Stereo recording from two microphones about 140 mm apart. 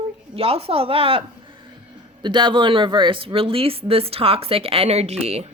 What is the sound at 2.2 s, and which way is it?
A woman's voice, 35° right (ahead or behind).